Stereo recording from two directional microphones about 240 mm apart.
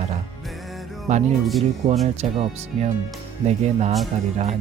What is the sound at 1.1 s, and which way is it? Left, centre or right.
Speech, right.